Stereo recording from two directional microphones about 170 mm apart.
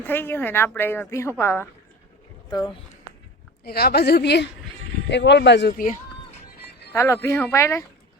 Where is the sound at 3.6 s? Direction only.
65° left (ahead or behind); by 5.7 s 85° left.